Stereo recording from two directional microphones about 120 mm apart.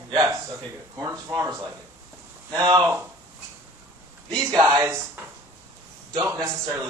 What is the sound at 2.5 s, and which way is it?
Speech, 35° right (ahead or behind).